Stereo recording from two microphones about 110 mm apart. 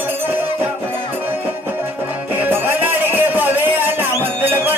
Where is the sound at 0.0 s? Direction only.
20° right (ahead or behind).